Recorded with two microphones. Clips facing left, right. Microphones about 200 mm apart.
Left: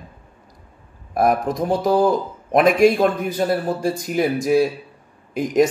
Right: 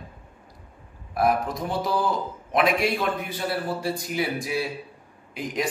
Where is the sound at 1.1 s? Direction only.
45° left (ahead or behind).